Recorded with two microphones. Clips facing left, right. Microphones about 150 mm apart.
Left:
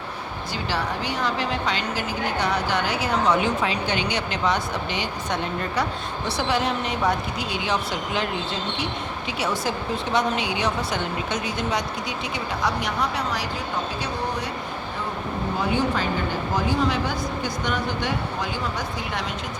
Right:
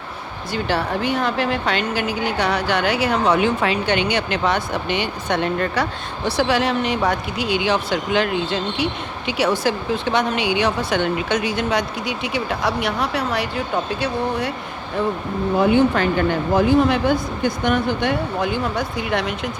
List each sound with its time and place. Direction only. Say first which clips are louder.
0.5 s a woman's voice: right 6 dB; 55° right (ahead or behind)
15.5 s a woman's voice: right 9 dB; 65° right (ahead or behind)